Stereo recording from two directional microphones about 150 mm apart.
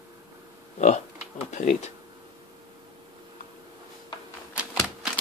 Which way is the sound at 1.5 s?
55° left (ahead or behind).